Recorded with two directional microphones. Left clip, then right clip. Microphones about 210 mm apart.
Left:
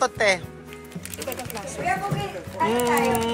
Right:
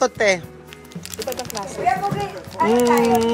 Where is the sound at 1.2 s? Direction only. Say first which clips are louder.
Right 5 dB; 50° right (ahead or behind).